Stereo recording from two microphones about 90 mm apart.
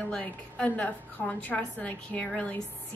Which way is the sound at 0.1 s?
15° left (ahead or behind).